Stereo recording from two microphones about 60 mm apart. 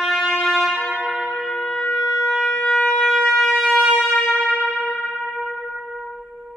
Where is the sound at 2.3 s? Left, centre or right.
Left.